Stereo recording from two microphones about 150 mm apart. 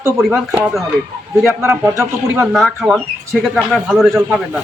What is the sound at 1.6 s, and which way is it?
Speech, 15° right (ahead or behind).